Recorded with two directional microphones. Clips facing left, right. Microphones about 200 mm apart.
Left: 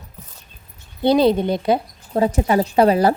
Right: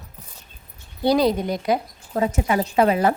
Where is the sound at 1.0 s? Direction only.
25° left (ahead or behind).